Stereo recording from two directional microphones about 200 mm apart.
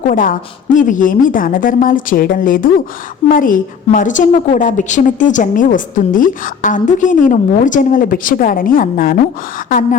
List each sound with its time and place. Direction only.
0.1 s a woman's voice: 40° left (ahead or behind)